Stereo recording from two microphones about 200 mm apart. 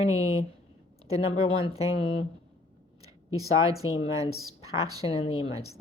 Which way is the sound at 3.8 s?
90° left.